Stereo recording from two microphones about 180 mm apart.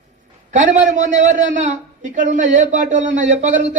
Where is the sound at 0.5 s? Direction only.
40° right (ahead or behind).